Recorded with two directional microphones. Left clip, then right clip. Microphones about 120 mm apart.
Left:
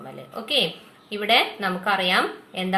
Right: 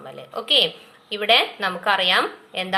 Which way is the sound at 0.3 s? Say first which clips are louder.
Right 5 dB; 35° right (ahead or behind).